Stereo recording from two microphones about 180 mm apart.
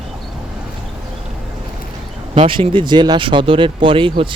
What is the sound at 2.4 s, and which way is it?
Speech, 30° right (ahead or behind).